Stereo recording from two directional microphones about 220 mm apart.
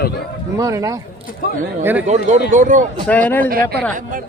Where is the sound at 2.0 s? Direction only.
30° right (ahead or behind).